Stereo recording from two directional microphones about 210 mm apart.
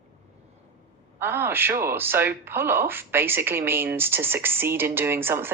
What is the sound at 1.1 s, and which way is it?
Speech, 10° right (ahead or behind).